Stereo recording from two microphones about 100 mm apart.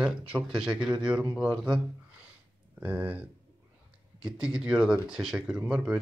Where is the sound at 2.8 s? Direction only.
15° right (ahead or behind).